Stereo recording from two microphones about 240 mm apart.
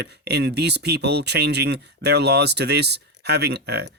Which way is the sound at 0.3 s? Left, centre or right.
Right.